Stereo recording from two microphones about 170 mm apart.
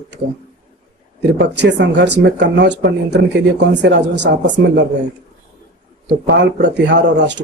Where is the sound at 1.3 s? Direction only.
90° right.